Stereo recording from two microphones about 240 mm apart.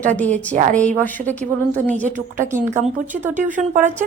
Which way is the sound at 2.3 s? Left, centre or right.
Centre.